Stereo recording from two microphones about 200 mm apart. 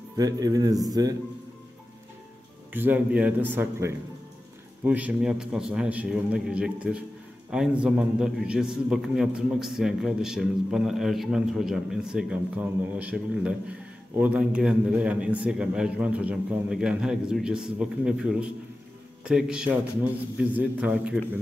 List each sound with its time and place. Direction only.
0.2 s speech: 20° right (ahead or behind)
2.7 s a man's voice: 10° right (ahead or behind)